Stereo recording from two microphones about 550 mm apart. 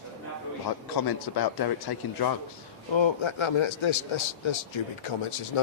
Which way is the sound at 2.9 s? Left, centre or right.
Left.